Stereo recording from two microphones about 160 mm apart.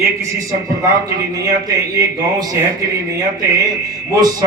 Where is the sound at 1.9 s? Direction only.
25° right (ahead or behind).